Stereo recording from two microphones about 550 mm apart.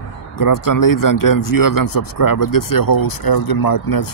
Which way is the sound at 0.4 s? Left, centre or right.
Left.